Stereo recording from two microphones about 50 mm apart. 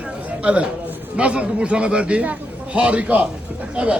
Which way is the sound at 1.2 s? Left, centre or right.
Right.